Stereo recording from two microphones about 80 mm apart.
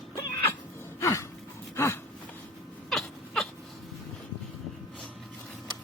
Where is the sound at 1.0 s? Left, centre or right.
Left.